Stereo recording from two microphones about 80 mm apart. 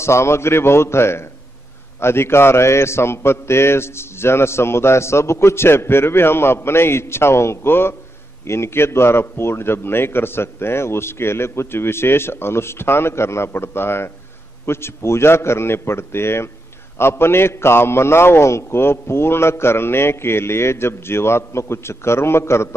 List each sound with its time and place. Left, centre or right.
0.0 s a man's voice: left